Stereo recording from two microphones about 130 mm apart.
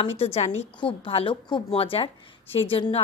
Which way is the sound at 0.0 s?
50° left (ahead or behind).